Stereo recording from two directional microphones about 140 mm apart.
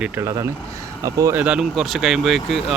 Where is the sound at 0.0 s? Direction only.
20° right (ahead or behind).